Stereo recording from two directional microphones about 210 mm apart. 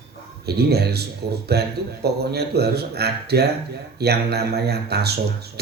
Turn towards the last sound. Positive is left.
turn(degrees=-50)  # may be behind; listen again after turning